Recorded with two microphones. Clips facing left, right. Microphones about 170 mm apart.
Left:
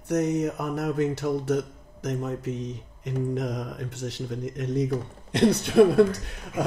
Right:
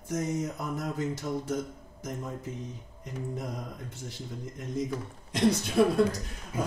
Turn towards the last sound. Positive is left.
turn(degrees=65)  # may be behind; listen again after turning